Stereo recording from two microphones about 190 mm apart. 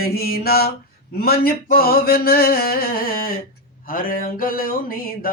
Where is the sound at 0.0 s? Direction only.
55° left (ahead or behind).